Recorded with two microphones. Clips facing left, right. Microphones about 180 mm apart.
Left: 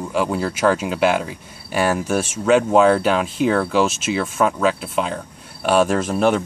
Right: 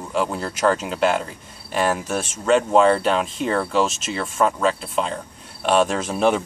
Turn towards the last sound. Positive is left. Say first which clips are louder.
# left 2 dB
turn(degrees=0)  # may be behind; listen again after turning